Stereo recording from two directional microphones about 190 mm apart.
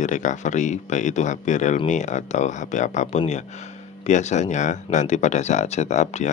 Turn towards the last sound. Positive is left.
turn(degrees=35)  # may be behind; listen again after turning